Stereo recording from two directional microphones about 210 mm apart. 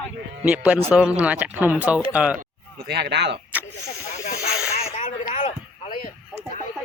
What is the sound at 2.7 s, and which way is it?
Speech, 50° right (ahead or behind).